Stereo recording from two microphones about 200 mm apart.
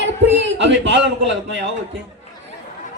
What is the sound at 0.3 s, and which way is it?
A man's voice, 65° right (ahead or behind).